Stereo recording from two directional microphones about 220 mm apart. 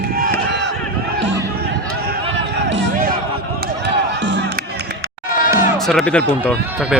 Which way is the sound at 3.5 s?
50° right (ahead or behind).